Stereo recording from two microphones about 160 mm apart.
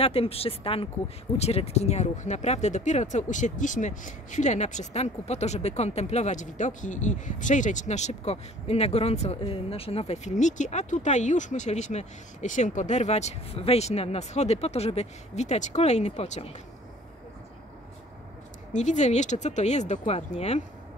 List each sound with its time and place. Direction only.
0.0 s speech: 40° left (ahead or behind)
18.7 s speech: 50° left (ahead or behind)